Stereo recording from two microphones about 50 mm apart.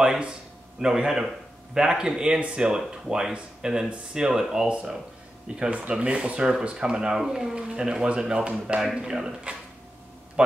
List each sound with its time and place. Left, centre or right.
0.7 s speech: centre